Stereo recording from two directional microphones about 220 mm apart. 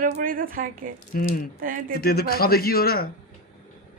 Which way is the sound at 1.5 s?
40° right (ahead or behind).